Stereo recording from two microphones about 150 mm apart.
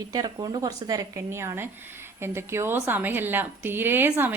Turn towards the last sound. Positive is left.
turn(degrees=-15)  # may be behind; listen again after turning